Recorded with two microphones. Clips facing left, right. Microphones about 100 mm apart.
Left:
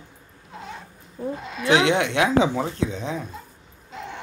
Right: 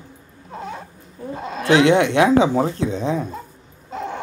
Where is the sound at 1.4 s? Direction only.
40° right (ahead or behind).